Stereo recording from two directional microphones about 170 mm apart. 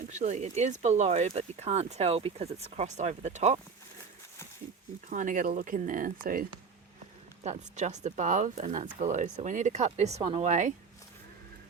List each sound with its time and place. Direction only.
0.1 s speech: 45° right (ahead or behind)
5.0 s speech: 50° right (ahead or behind)
7.4 s speech: 45° right (ahead or behind)